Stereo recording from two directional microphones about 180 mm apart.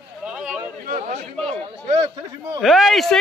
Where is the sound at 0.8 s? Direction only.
45° right (ahead or behind).